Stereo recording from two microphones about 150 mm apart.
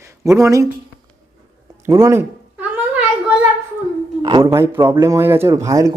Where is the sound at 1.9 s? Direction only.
20° right (ahead or behind).